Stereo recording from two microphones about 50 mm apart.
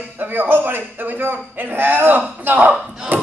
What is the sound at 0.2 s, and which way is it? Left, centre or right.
A man's voice, right.